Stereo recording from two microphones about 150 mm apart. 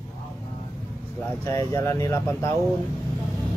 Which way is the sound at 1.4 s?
20° left (ahead or behind).